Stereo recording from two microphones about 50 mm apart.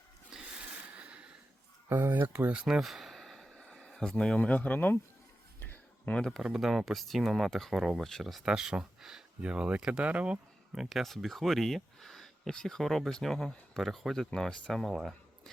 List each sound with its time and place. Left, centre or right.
0.3 s a sound: centre
1.9 s speech: right
2.5 s speech: centre
2.8 s a sound: centre
3.5 s a sound: centre
4.1 s a man's voice: centre
4.4 s speech: left
5.5 s a sound: left
6.4 s speech: centre
8.4 s speech: centre
9.4 s speech: right
10.8 s speech: centre